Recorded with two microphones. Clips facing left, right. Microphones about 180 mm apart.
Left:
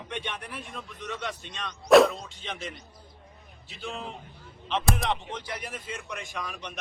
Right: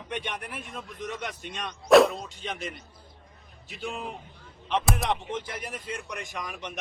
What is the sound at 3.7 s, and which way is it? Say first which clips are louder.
Speech: right 2 dB; 15° right (ahead or behind).